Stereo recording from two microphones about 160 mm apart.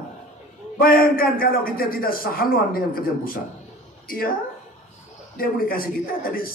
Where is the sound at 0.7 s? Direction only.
65° left (ahead or behind).